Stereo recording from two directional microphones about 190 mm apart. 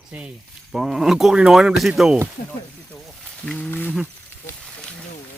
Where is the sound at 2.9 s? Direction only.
5° left (ahead or behind).